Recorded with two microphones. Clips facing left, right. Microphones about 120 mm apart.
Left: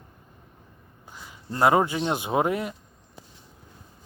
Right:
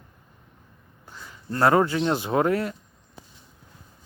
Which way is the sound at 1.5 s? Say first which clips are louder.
Right 1 dB; 15° left (ahead or behind).